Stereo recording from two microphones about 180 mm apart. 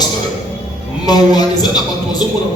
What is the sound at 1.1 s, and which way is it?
Speech, 20° left (ahead or behind).